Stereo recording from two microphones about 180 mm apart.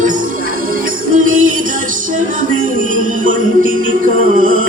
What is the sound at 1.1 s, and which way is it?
Music, 45° right (ahead or behind).